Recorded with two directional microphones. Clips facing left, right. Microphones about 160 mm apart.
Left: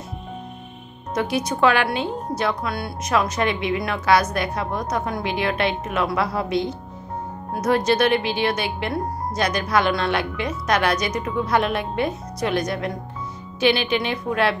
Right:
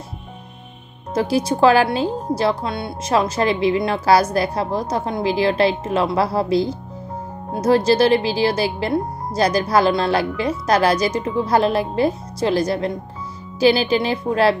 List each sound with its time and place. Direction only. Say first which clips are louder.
1.1 s speech: right 4 dB; 30° right (ahead or behind)